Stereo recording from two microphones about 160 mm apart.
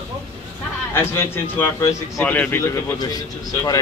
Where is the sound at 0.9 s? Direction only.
15° left (ahead or behind).